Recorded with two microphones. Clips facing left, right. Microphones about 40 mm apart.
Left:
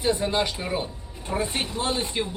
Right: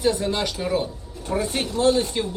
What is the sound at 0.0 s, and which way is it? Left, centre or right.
Speech, left.